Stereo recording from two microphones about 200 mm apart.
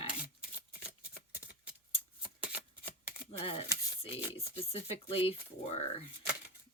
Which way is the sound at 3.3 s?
30° left (ahead or behind).